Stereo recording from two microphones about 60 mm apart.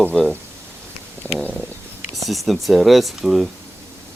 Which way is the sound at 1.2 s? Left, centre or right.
Left.